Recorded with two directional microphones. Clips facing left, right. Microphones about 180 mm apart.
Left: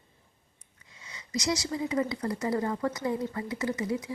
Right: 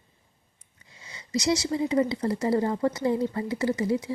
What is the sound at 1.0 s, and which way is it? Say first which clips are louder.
Speech: right 5 dB; 30° right (ahead or behind).